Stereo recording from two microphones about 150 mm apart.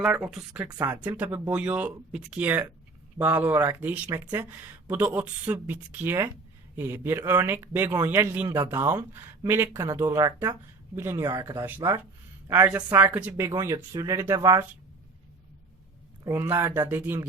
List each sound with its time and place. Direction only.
0.0 s speech: 5° right (ahead or behind)
0.7 s speech: 25° right (ahead or behind)
1.1 s speech: 10° right (ahead or behind)
16.2 s speech: 15° right (ahead or behind)